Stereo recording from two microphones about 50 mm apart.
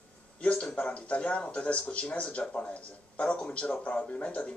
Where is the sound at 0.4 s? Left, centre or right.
Left.